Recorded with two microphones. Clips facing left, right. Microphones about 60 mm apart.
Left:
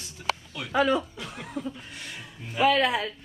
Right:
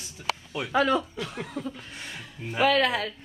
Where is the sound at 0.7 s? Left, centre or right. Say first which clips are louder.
Even; centre.